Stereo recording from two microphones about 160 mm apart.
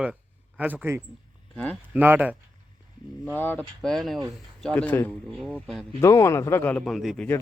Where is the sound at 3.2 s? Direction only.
10° left (ahead or behind).